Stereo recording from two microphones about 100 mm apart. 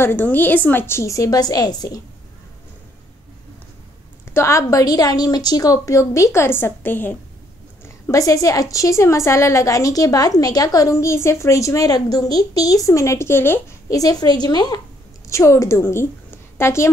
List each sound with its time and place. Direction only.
0.0 s a woman's voice: 20° left (ahead or behind); by 2.0 s 40° left (ahead or behind)
4.3 s a woman's voice: 30° left (ahead or behind)
7.8 s a woman's voice: 35° left (ahead or behind)
13.8 s a woman's voice: 35° left (ahead or behind)
15.2 s a woman's voice: 30° left (ahead or behind)